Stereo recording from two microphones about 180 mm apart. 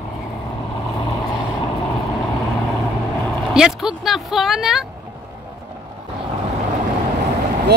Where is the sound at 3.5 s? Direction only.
5° right (ahead or behind).